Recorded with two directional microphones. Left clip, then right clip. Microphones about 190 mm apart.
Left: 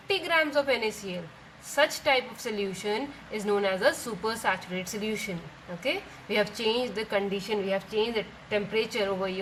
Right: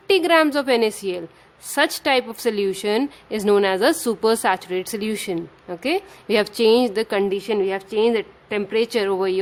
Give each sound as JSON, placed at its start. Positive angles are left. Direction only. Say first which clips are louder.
{"t": 0.1, "sound": "a woman's voice", "louder": "right 9 dB", "side_deg": -60}